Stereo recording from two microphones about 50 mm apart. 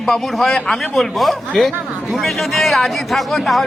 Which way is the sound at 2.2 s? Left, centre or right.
Centre.